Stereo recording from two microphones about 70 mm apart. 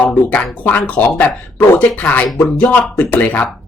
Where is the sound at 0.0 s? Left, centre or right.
Left.